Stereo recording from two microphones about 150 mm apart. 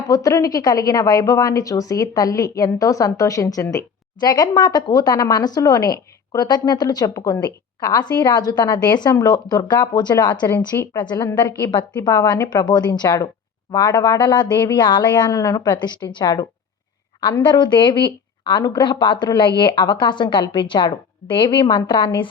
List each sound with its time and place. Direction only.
0.1 s a woman's voice: 20° left (ahead or behind)